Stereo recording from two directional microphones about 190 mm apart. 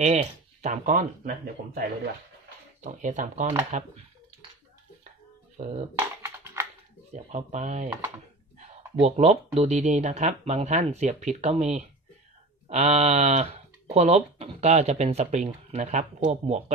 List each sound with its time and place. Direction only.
0.0 s speech: 35° right (ahead or behind)
5.6 s speech: 35° right (ahead or behind)
5.9 s typing: 15° right (ahead or behind)
7.1 s speech: 40° right (ahead or behind)